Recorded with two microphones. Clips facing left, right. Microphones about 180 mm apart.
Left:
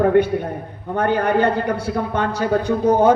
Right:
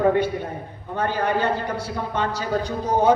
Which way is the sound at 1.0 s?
60° left (ahead or behind).